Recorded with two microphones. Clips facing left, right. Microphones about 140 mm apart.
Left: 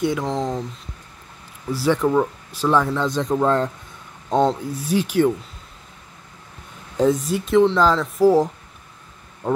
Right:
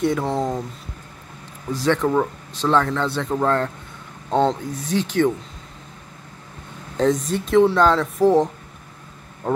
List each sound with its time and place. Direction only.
0.0 s speech: centre (ahead or behind)
1.7 s speech: 10° left (ahead or behind)
7.0 s speech: 5° left (ahead or behind)